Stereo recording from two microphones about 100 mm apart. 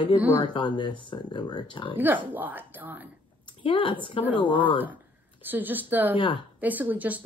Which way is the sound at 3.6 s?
55° left (ahead or behind).